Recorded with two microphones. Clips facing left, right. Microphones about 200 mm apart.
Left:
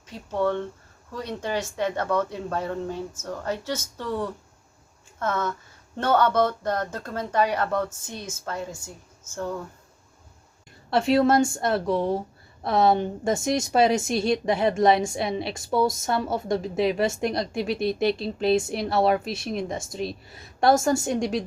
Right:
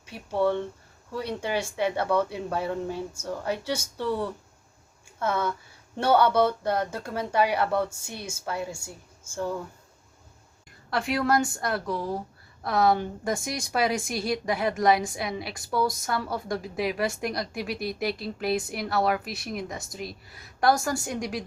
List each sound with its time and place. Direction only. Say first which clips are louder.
0.0 s speech: even; 10° right (ahead or behind)
10.8 s a woman's voice: left 6 dB; 25° left (ahead or behind)